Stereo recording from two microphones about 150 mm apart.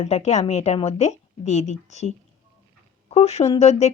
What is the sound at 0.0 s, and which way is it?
A woman's voice, 50° left (ahead or behind).